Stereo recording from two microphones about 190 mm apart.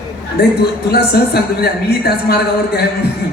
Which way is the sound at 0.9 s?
55° left (ahead or behind).